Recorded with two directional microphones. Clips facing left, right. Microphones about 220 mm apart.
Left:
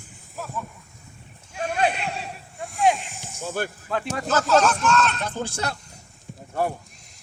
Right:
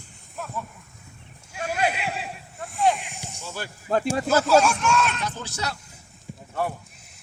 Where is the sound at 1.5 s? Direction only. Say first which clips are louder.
Left 2 dB; 5° right (ahead or behind).